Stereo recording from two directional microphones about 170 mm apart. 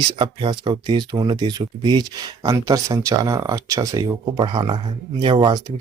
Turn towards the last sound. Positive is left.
turn(degrees=-25)  # may be behind; listen again after turning